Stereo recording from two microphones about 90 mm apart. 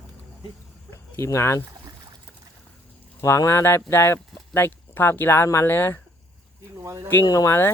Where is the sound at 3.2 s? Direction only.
35° left (ahead or behind).